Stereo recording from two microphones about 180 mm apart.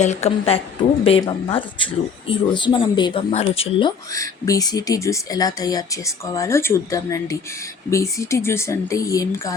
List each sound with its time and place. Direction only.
0.0 s a woman's voice: 40° left (ahead or behind); by 9.6 s 20° left (ahead or behind)